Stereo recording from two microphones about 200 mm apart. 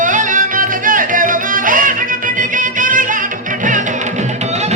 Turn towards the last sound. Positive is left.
turn(degrees=-40)  # may be behind; listen again after turning